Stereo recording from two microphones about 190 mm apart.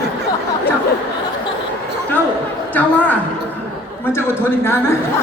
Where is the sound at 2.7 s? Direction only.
10° left (ahead or behind).